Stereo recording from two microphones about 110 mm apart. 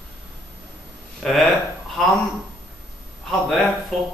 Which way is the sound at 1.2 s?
Centre (ahead or behind).